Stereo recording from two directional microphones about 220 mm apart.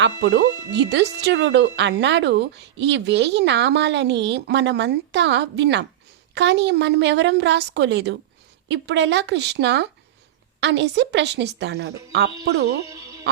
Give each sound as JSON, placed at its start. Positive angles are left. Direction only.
{"t": 0.0, "sound": "speech", "side_deg": -50}
{"t": 12.9, "sound": "music", "side_deg": -15}